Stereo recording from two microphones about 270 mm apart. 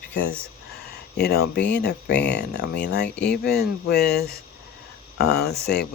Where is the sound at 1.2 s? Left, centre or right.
Left.